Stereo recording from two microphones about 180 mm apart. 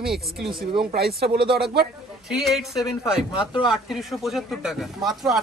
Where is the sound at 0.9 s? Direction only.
60° right (ahead or behind).